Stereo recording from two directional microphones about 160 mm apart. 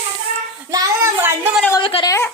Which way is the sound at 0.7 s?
20° right (ahead or behind).